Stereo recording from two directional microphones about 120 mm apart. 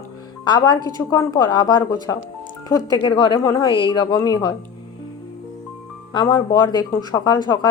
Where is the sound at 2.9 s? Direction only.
40° left (ahead or behind).